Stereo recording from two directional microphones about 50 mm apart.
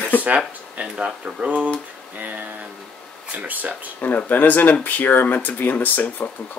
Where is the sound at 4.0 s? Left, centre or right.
Left.